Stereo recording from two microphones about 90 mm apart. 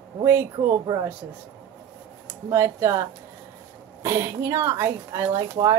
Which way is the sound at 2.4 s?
35° right (ahead or behind).